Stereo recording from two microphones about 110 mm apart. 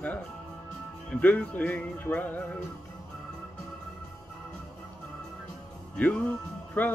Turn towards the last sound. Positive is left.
turn(degrees=15)  # may be behind; listen again after turning